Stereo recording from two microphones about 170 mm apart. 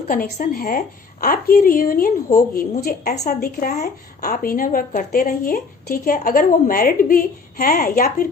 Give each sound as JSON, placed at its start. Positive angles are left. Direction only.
{"t": 0.1, "sound": "a woman's voice", "side_deg": 55}